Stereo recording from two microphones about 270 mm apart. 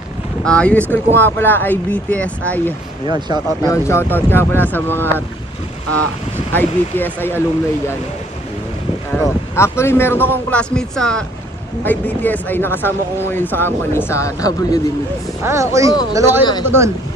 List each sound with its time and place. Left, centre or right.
0.4 s speech: centre
3.1 s speech: centre
3.6 s speech: centre
6.5 s speech: centre
9.1 s speech: centre
15.4 s speech: centre